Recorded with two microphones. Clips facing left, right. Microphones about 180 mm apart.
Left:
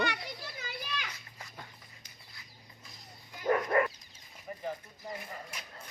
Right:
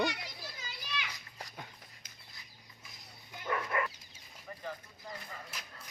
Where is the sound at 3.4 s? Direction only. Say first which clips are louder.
Left 7 dB; 40° left (ahead or behind).